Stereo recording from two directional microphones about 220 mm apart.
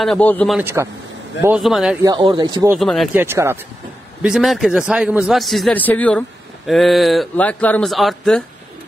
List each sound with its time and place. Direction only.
0.0 s a man's voice: 5° left (ahead or behind)
0.6 s a man's voice: 10° right (ahead or behind)
2.0 s speech: 20° right (ahead or behind)
2.7 s a man's voice: centre (ahead or behind)
3.2 s a man's voice: 10° right (ahead or behind)